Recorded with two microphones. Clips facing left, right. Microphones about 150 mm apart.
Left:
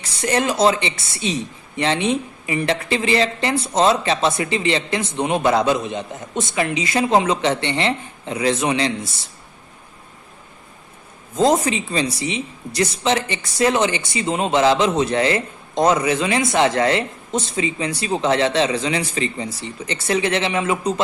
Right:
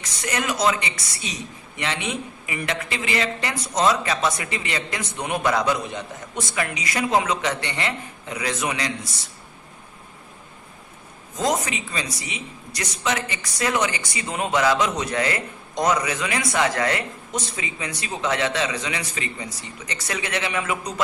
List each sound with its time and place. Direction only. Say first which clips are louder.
0.0 s speech: left 7 dB; 30° left (ahead or behind)
11.3 s speech: left 7 dB; 30° left (ahead or behind)